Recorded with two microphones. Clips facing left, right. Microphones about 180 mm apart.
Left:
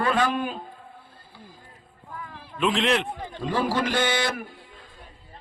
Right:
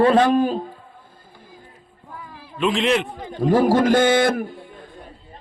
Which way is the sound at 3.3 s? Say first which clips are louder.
Right 10 dB; 45° right (ahead or behind).